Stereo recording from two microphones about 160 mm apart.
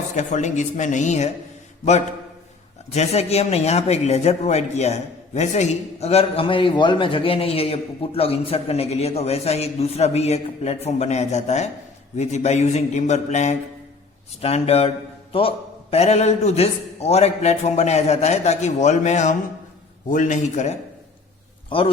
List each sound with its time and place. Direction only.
0.2 s a man's voice: 50° left (ahead or behind)